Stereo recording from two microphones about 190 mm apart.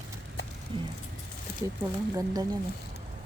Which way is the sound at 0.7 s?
30° right (ahead or behind).